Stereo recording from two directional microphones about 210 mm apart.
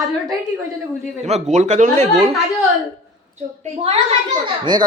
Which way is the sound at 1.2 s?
30° right (ahead or behind).